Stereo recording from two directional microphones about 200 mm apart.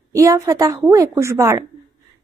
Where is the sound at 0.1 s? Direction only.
15° right (ahead or behind).